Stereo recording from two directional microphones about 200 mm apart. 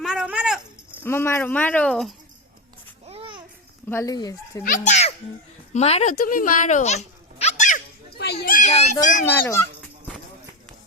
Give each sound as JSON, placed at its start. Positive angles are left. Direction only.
{"t": 0.0, "sound": "a sound", "side_deg": -5}
{"t": 1.0, "sound": "speech", "side_deg": 10}
{"t": 3.1, "sound": "babbling", "side_deg": -25}
{"t": 3.8, "sound": "speech", "side_deg": 15}
{"t": 4.6, "sound": "a child's voice", "side_deg": 40}
{"t": 8.2, "sound": "children playing", "side_deg": 55}
{"t": 8.7, "sound": "a child's voice", "side_deg": 35}
{"t": 9.2, "sound": "speech", "side_deg": 10}